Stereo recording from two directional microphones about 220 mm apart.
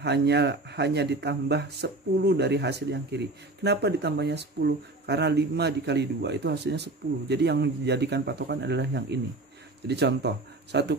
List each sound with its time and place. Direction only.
0.0 s speech: 50° right (ahead or behind)